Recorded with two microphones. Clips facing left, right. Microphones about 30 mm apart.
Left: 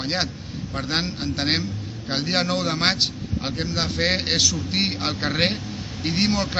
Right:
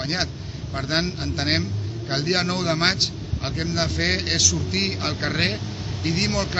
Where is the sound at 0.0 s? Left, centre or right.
Centre.